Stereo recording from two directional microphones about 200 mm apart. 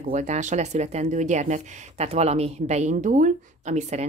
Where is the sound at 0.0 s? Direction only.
40° right (ahead or behind).